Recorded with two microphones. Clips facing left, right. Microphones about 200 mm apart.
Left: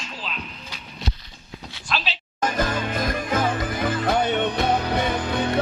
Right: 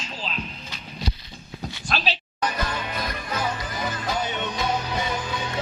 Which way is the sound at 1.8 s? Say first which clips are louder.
Even; 45° right (ahead or behind).